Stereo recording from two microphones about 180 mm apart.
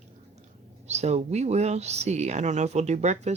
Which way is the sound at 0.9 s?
35° right (ahead or behind).